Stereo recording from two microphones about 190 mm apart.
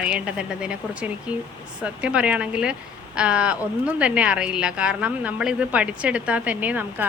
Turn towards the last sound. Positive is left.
turn(degrees=-10)  # may be behind; listen again after turning